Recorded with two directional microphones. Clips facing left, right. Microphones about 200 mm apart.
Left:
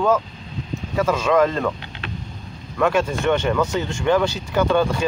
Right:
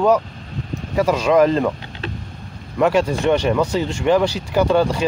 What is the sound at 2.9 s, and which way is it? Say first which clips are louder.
Speech: right 3 dB; 35° right (ahead or behind).